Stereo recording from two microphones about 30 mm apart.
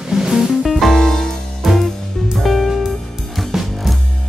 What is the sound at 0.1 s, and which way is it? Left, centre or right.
Music, centre.